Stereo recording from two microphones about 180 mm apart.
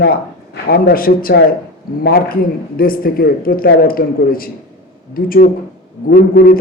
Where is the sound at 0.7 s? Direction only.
55° left (ahead or behind).